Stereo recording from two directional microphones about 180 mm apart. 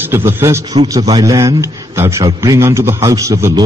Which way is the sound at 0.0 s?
15° right (ahead or behind).